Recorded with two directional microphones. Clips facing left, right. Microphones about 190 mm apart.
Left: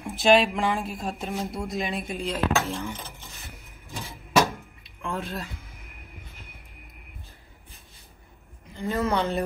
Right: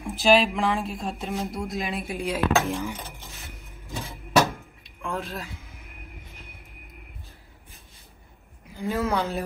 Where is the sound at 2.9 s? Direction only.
15° right (ahead or behind).